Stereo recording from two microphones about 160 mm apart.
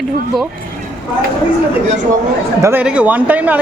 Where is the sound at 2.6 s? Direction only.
15° right (ahead or behind).